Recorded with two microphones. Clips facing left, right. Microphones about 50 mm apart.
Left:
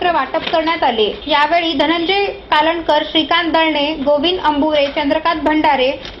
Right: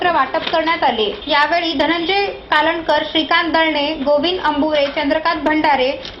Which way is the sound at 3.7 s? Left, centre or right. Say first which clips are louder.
Left 2 dB; left.